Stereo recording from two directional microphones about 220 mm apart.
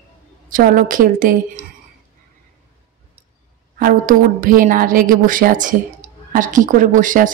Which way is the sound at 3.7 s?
40° right (ahead or behind).